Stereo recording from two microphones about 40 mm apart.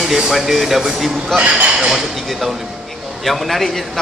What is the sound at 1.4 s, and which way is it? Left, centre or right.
Speech, right.